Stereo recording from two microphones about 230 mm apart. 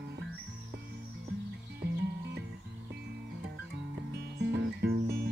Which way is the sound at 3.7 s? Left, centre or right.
Right.